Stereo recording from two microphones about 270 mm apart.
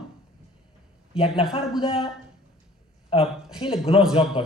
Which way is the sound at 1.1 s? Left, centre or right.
Left.